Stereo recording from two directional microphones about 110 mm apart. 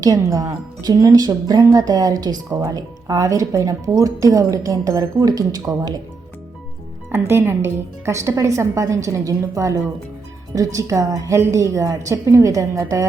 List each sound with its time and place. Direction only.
0.0 s speech: 30° right (ahead or behind)
7.1 s a woman's voice: 25° right (ahead or behind)